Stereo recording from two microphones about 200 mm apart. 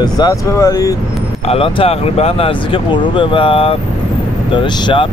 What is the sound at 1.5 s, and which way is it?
Speech, 30° left (ahead or behind).